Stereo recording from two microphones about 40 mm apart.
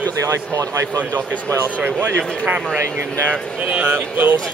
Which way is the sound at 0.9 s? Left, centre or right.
Left.